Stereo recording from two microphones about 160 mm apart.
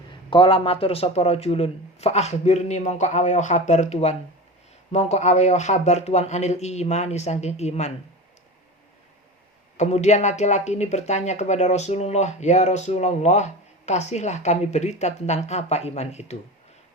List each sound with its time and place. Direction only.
0.1 s a man's voice: 30° left (ahead or behind)
9.7 s speech: 45° left (ahead or behind)